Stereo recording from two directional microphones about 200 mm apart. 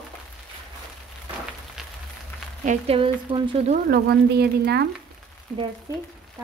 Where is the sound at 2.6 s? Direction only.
35° right (ahead or behind).